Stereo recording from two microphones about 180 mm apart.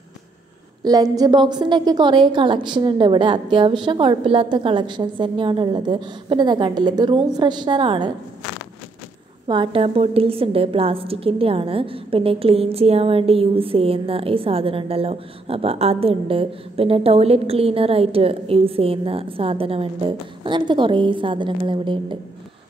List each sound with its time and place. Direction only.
0.8 s a woman's voice: 20° right (ahead or behind)
9.5 s a woman's voice: 30° right (ahead or behind)